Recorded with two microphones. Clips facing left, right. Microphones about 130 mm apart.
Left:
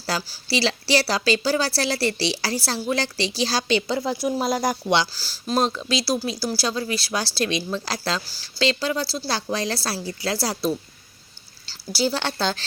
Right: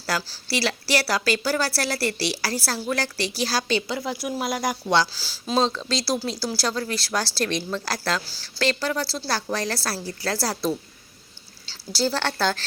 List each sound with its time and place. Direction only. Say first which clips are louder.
0.5 s a woman's voice: left 3 dB; 20° left (ahead or behind)
5.1 s speech: even; centre (ahead or behind)
5.6 s a woman's voice: left 1 dB; 15° left (ahead or behind)
11.9 s a woman's voice: left 1 dB; 15° left (ahead or behind)